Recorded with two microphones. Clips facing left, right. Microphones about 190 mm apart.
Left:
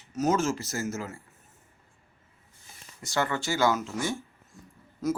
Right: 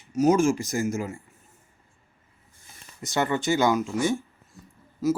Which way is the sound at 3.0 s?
20° right (ahead or behind).